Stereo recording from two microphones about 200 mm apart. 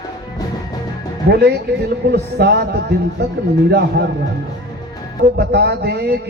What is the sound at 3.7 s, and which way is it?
Speech, 55° right (ahead or behind).